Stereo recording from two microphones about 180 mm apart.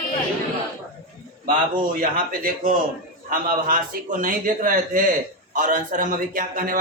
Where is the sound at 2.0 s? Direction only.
50° right (ahead or behind).